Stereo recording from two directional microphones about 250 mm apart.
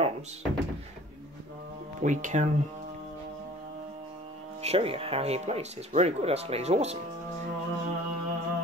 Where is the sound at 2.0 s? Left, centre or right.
Right.